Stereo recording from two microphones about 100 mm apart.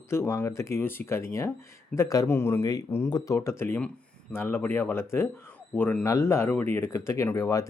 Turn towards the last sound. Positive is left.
turn(degrees=30)  # may be behind; listen again after turning